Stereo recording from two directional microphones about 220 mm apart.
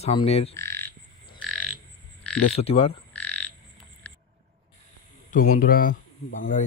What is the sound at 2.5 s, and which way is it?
Speech, 25° left (ahead or behind).